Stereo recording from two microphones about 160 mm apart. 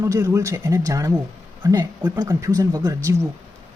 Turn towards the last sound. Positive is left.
turn(degrees=-20)  # may be behind; listen again after turning